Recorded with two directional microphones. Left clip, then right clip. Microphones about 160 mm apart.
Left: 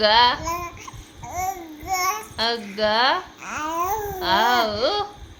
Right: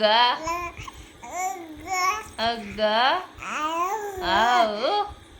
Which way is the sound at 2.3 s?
50° left (ahead or behind).